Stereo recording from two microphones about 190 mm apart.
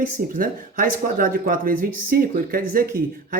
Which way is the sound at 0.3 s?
50° right (ahead or behind).